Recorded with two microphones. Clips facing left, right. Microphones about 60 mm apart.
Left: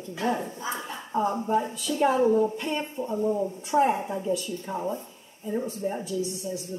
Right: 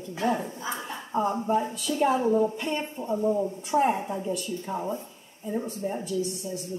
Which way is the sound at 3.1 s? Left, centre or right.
Centre.